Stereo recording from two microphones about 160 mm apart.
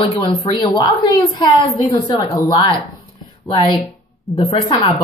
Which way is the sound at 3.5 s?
30° left (ahead or behind).